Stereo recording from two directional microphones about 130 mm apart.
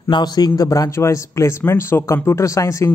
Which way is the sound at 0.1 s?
30° left (ahead or behind).